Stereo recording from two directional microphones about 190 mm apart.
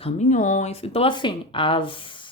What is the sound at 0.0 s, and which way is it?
Speech, 40° left (ahead or behind).